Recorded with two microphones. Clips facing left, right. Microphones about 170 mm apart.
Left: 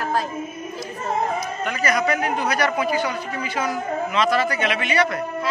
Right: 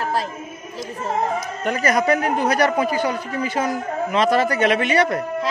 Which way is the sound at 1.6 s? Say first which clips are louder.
Right 4 dB; 40° right (ahead or behind).